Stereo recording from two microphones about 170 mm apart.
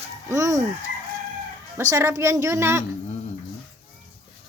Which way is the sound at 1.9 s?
15° right (ahead or behind).